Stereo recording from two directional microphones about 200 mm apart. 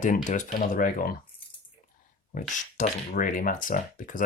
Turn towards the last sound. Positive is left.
turn(degrees=40)  # may be behind; listen again after turning